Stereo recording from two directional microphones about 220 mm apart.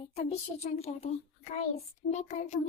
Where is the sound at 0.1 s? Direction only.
30° left (ahead or behind).